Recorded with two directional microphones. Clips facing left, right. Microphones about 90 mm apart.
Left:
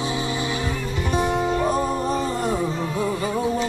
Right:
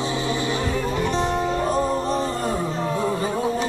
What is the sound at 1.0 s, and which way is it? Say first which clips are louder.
Music: left 4 dB; 15° left (ahead or behind).